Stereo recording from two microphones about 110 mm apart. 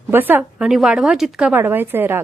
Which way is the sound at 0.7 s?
5° right (ahead or behind).